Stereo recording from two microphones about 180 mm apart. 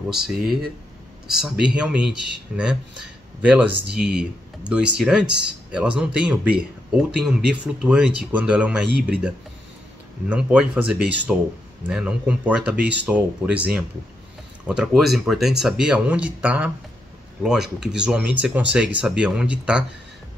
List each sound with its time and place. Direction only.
0.1 s speech: 5° right (ahead or behind)
10.3 s speech: 5° right (ahead or behind)